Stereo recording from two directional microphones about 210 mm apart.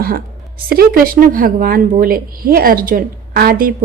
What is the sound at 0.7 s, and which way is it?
A woman's voice, 45° right (ahead or behind).